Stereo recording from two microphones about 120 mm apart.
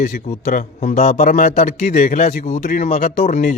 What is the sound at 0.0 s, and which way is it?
A man's voice, 80° left.